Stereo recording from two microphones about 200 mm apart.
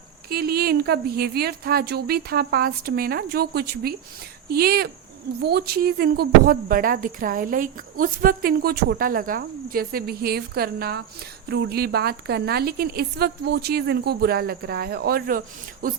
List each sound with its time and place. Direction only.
0.3 s speech: 50° right (ahead or behind)